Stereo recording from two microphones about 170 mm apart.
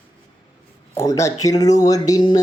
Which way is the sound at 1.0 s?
20° left (ahead or behind).